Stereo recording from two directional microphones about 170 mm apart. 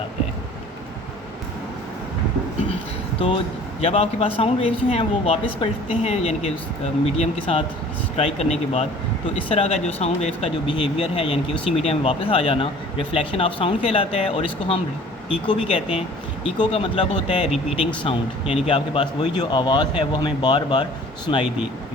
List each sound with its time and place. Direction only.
3.8 s speech: 35° left (ahead or behind)